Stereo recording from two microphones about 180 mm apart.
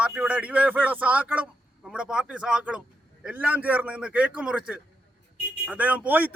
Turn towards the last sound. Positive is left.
turn(degrees=-10)  # may be behind; listen again after turning